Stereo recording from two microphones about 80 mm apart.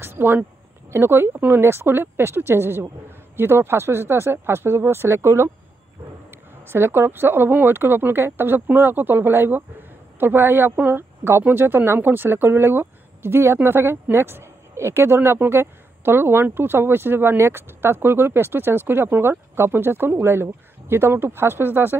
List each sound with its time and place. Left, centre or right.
0.0 s speech: right
6.7 s speech: right